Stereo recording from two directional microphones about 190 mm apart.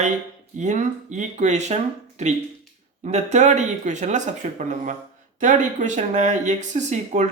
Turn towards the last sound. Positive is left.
turn(degrees=-40)  # may be behind; listen again after turning